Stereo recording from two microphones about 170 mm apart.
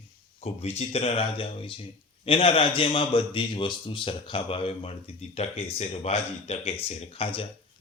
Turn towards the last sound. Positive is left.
turn(degrees=30)  # may be behind; listen again after turning